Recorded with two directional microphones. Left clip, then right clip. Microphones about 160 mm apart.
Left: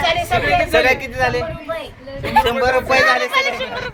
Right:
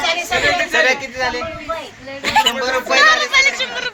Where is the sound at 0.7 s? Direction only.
80° left.